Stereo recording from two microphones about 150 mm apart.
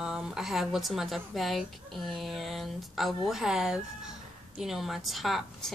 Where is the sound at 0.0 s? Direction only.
5° right (ahead or behind).